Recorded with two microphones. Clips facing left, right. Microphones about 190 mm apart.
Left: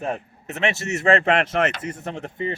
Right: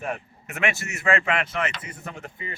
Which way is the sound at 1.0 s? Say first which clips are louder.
Left 6 dB; 40° left (ahead or behind).